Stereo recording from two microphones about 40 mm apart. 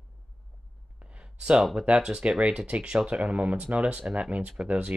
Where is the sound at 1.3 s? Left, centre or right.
Right.